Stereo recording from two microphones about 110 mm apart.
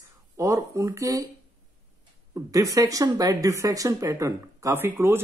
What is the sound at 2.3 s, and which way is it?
Speech, 30° right (ahead or behind).